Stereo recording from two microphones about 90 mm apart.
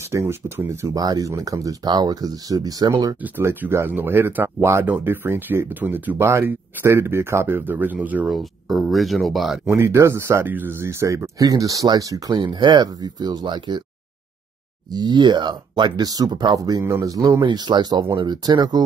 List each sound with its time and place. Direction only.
0.1 s speech: 30° right (ahead or behind)
0.9 s speech: 45° right (ahead or behind)
3.2 s speech: 20° right (ahead or behind)
8.3 s speech: centre (ahead or behind)
9.8 s speech: 30° right (ahead or behind)
12.4 s speech: 60° right (ahead or behind)
14.9 s speech: 55° right (ahead or behind)
16.5 s speech: 40° right (ahead or behind)